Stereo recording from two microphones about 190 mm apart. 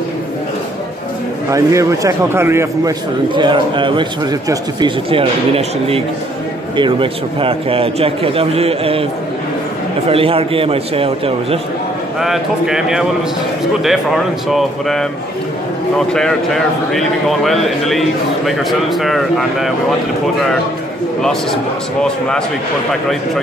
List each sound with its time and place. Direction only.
1.5 s a man's voice: 15° right (ahead or behind)
3.3 s a man's voice: 25° right (ahead or behind)
10.0 s a man's voice: 30° right (ahead or behind)
12.2 s a man's voice: centre (ahead or behind)
16.1 s a man's voice: 5° left (ahead or behind)
21.2 s a man's voice: centre (ahead or behind)